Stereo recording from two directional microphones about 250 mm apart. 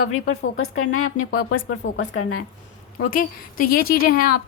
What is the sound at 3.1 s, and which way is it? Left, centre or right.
A woman's voice, left.